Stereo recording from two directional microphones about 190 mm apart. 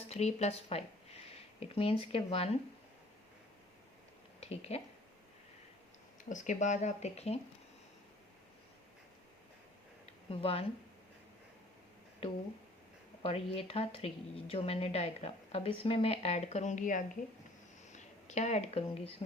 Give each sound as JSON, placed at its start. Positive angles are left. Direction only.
{"t": 0.1, "sound": "speech", "side_deg": 35}
{"t": 4.4, "sound": "a sound", "side_deg": 35}
{"t": 6.2, "sound": "a woman's voice", "side_deg": 40}
{"t": 10.2, "sound": "speech", "side_deg": 30}
{"t": 13.2, "sound": "a woman's voice", "side_deg": 30}